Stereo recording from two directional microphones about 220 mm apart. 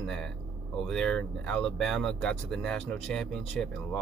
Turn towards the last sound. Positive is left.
turn(degrees=0)  # may be behind; listen again after turning